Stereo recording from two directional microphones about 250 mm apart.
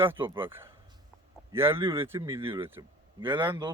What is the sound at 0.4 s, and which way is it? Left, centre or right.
Speech, centre.